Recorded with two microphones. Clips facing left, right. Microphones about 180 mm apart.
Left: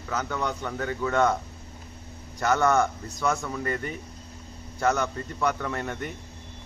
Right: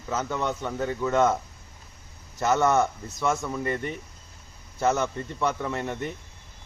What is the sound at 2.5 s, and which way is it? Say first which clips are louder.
Speech: even; 20° right (ahead or behind).